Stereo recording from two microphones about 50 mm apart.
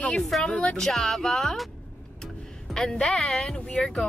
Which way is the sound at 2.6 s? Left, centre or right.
Centre.